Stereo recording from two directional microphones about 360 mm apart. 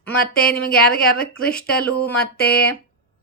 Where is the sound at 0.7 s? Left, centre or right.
Left.